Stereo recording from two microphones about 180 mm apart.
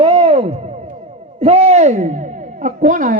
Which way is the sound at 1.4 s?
35° right (ahead or behind).